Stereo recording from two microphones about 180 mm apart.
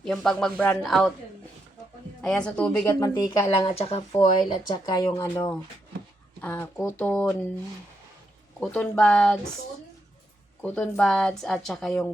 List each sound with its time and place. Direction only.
0.0 s speech: centre (ahead or behind)
2.2 s a woman's voice: 5° left (ahead or behind)
3.5 s speech: 30° left (ahead or behind)
4.5 s speech: 20° left (ahead or behind)
6.4 s a woman's voice: 10° left (ahead or behind)
8.6 s speech: 5° left (ahead or behind)
10.6 s speech: 5° left (ahead or behind)